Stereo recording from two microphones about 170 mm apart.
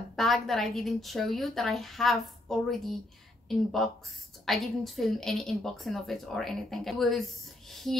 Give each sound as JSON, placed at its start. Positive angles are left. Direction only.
{"t": 0.1, "sound": "a woman's voice", "side_deg": 0}